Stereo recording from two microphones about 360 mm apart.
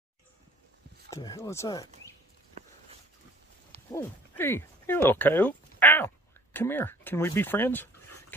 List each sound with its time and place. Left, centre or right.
1.1 s speech: centre
2.6 s a sound: centre
3.9 s speech: centre